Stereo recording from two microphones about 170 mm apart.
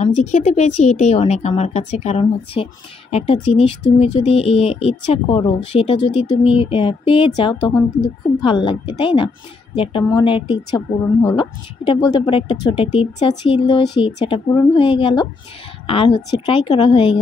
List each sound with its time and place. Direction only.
0.0 s a woman's voice: 40° left (ahead or behind)